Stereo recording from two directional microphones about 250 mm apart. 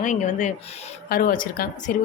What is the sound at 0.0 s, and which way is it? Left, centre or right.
A woman's voice, left.